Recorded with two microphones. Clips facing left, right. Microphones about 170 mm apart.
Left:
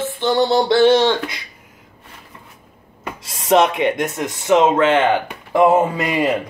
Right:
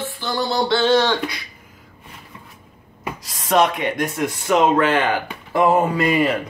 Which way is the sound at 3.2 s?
25° left (ahead or behind).